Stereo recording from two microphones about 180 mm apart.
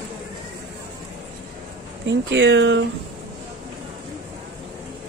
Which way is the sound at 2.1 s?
90° right.